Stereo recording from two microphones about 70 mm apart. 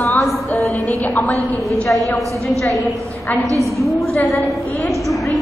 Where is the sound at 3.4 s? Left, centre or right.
Right.